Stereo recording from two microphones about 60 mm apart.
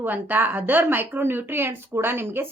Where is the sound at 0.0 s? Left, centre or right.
Right.